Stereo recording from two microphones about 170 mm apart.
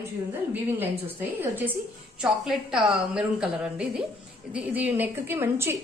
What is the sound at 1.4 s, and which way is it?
A woman's voice, 10° right (ahead or behind).